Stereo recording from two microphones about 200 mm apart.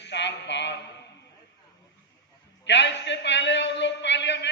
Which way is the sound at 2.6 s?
60° left (ahead or behind).